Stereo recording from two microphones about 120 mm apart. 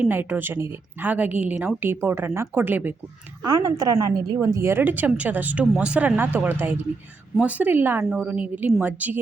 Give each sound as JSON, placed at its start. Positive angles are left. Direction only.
{"t": 0.0, "sound": "a woman's voice", "side_deg": -15}
{"t": 3.4, "sound": "a woman's voice", "side_deg": -30}